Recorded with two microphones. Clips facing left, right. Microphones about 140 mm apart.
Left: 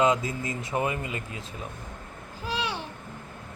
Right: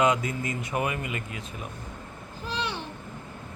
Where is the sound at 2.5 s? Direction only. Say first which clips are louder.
Left 1 dB; 10° left (ahead or behind).